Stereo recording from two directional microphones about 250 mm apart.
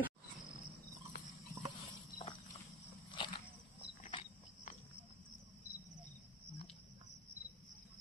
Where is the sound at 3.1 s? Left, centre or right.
Centre.